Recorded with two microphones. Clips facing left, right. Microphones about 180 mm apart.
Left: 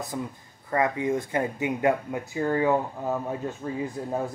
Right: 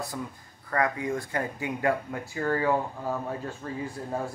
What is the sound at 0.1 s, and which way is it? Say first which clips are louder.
A man's voice: left 3 dB; 20° left (ahead or behind).